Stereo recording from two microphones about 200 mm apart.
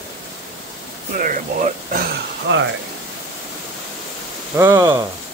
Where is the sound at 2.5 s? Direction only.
65° right (ahead or behind).